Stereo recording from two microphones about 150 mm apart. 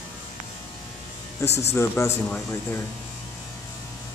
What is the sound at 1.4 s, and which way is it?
Speech, 20° left (ahead or behind).